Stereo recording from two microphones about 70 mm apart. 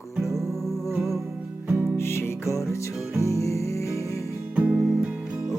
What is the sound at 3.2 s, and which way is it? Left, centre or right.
Music, left.